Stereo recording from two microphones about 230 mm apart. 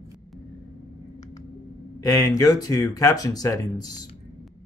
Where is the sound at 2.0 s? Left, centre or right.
Centre.